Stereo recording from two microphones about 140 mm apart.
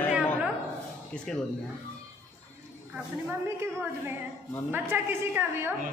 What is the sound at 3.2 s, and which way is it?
A woman's voice, 15° right (ahead or behind).